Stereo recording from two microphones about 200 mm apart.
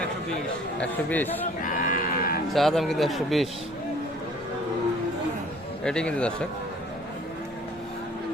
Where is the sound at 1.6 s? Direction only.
45° left (ahead or behind).